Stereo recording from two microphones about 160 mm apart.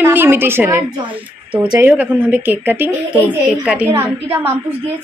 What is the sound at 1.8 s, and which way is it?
Speech, 10° right (ahead or behind).